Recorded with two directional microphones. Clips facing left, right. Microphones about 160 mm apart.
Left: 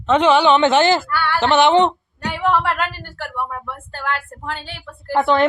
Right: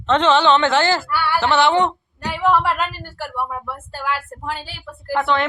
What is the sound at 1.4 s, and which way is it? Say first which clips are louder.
Speech: left 4 dB; 20° left (ahead or behind).